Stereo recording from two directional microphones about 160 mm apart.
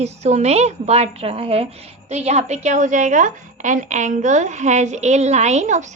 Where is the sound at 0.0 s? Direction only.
45° right (ahead or behind).